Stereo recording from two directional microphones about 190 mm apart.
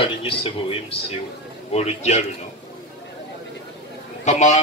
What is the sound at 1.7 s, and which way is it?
Speech, 35° left (ahead or behind).